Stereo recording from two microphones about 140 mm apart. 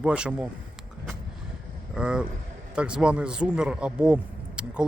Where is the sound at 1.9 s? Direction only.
5° right (ahead or behind).